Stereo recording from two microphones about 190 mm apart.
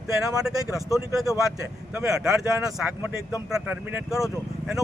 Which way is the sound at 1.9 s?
5° right (ahead or behind).